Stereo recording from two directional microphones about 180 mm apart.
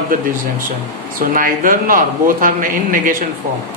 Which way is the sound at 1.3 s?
50° right (ahead or behind).